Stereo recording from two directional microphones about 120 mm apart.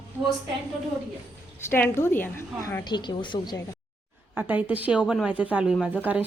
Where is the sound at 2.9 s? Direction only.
40° left (ahead or behind).